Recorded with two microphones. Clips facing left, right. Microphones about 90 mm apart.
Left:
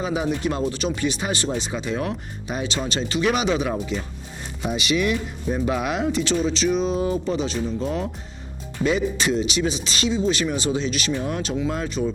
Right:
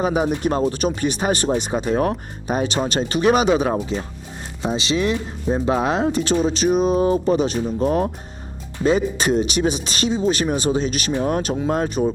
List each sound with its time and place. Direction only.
0.0 s speech: 45° right (ahead or behind)
6.1 s speech: 45° right (ahead or behind)